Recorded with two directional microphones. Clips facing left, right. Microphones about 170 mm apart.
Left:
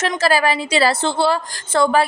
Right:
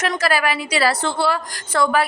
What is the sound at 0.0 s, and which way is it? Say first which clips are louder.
A woman's voice: left 3 dB; 25° left (ahead or behind).